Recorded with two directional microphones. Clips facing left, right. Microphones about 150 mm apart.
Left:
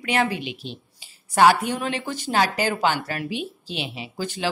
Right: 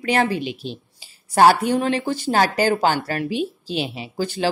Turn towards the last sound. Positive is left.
turn(degrees=-35)  # may be behind; listen again after turning